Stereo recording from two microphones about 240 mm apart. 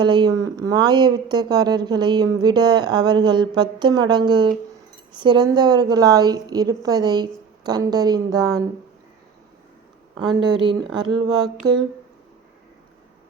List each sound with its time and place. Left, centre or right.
0.0 s speech: centre
10.2 s speech: centre